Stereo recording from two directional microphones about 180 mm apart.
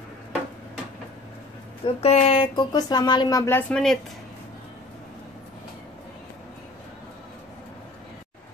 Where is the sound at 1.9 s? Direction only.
35° left (ahead or behind); by 4.0 s 5° left (ahead or behind).